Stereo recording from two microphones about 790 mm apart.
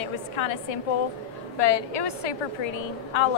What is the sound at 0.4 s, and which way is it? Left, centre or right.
A woman's voice, left.